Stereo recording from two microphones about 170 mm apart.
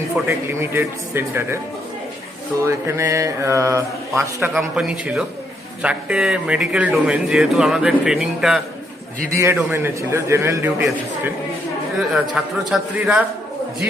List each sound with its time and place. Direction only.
0.3 s a man's voice: 15° right (ahead or behind)
2.6 s a man's voice: 15° right (ahead or behind)
4.4 s a man's voice: 5° right (ahead or behind)
9.3 s a man's voice: 15° right (ahead or behind)
12.1 s a man's voice: 5° right (ahead or behind)